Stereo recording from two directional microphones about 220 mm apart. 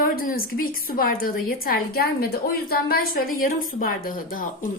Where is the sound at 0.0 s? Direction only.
40° left (ahead or behind).